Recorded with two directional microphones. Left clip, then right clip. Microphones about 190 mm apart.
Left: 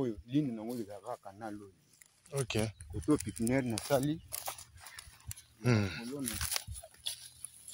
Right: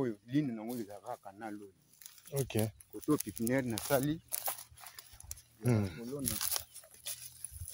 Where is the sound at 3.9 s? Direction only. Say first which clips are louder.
Left 1 dB; 25° left (ahead or behind).